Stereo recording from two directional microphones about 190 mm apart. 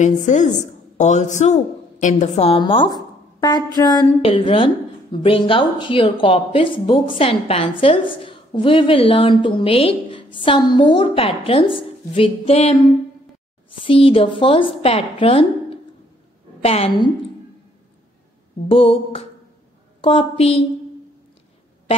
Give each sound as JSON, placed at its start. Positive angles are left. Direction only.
{"t": 0.0, "sound": "a woman's voice", "side_deg": 40}
{"t": 13.8, "sound": "speech", "side_deg": 30}
{"t": 16.6, "sound": "a woman's voice", "side_deg": 30}
{"t": 18.7, "sound": "speech", "side_deg": 30}